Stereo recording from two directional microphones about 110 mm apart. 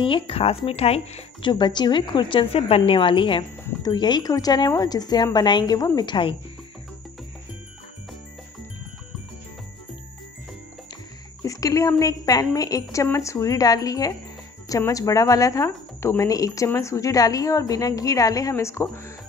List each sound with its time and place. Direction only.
0.0 s speech: 55° left (ahead or behind)
1.4 s a woman's voice: 45° left (ahead or behind)
3.8 s a woman's voice: 40° left (ahead or behind)
11.4 s a sound: 30° left (ahead or behind)
12.0 s speech: 35° left (ahead or behind)